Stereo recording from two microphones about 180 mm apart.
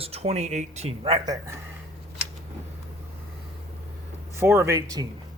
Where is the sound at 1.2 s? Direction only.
20° right (ahead or behind).